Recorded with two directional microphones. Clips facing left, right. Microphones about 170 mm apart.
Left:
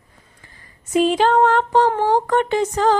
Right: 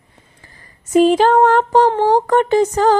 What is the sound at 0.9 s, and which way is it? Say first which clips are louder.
Music: right 4 dB; 45° right (ahead or behind).